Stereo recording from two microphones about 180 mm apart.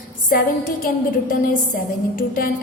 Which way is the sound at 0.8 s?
50° left (ahead or behind).